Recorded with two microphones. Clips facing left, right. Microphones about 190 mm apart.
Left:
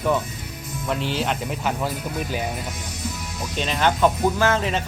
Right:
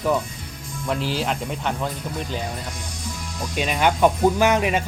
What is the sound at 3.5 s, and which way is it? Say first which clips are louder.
Speech: right 1 dB; 10° right (ahead or behind).